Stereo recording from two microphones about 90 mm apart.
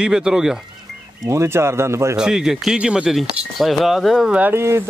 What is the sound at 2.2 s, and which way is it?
Speech, 5° right (ahead or behind).